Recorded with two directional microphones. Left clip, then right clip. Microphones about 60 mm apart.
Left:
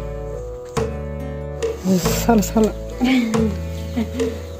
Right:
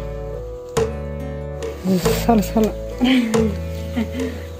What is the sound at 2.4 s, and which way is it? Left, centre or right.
Speech, left.